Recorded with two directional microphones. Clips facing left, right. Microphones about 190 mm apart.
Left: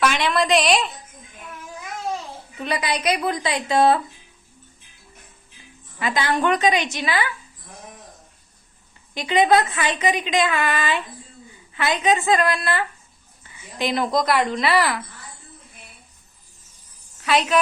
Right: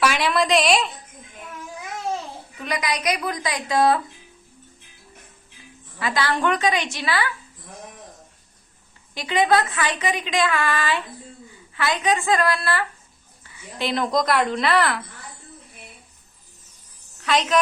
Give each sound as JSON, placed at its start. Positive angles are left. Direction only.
{"t": 0.0, "sound": "a woman's voice", "side_deg": -5}
{"t": 2.6, "sound": "a woman's voice", "side_deg": 30}
{"t": 6.0, "sound": "a woman's voice", "side_deg": 20}
{"t": 9.1, "sound": "a woman's voice", "side_deg": 20}
{"t": 17.2, "sound": "a woman's voice", "side_deg": 5}